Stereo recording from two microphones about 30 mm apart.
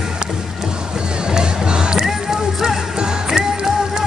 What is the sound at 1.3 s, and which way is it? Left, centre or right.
Music, right.